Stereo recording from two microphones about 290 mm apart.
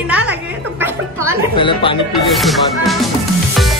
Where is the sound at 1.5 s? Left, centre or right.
Centre.